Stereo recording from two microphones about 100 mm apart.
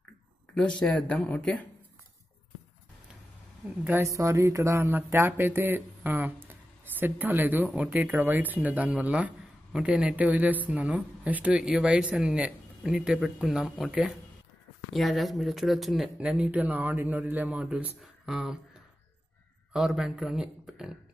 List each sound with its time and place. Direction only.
0.6 s speech: 10° left (ahead or behind)
3.8 s a man's voice: 25° right (ahead or behind); by 16.1 s centre (ahead or behind)
16.2 s speech: 10° right (ahead or behind)
19.7 s a man's voice: 5° right (ahead or behind)